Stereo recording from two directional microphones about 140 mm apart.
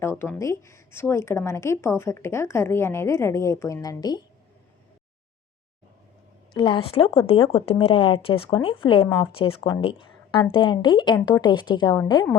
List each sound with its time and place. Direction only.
0.0 s speech: 20° left (ahead or behind)
6.5 s speech: 35° left (ahead or behind)